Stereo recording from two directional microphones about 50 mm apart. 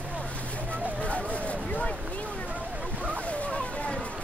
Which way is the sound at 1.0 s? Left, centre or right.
Left.